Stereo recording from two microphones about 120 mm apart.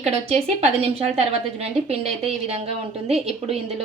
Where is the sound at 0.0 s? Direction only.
60° right (ahead or behind).